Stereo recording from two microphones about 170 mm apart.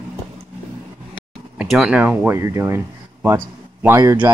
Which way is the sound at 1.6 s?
5° right (ahead or behind).